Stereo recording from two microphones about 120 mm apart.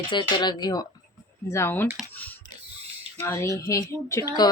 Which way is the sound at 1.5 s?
20° left (ahead or behind).